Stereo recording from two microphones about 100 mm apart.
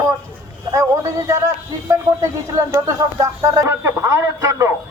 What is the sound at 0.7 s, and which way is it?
A man's voice, 30° right (ahead or behind).